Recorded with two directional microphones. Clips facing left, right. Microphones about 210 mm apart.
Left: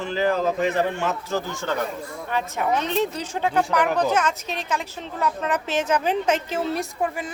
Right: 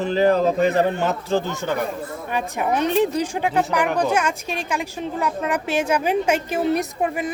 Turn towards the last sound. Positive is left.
turn(degrees=-20)  # may be behind; listen again after turning